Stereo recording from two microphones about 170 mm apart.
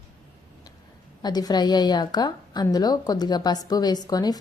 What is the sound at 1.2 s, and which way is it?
A woman's voice, 25° left (ahead or behind).